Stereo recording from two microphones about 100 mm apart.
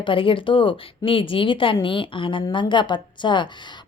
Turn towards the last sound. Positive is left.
turn(degrees=50)  # may be behind; listen again after turning